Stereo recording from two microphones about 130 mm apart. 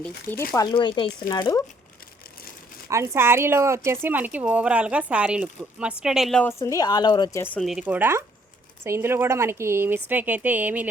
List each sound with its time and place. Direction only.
0.0 s speech: 15° left (ahead or behind)
0.5 s speech: 35° left (ahead or behind)
2.9 s a woman's voice: 20° right (ahead or behind); by 6.4 s centre (ahead or behind)
6.4 s speech: 20° left (ahead or behind)
7.3 s speech: 15° left (ahead or behind)
7.6 s a woman's voice: 5° right (ahead or behind)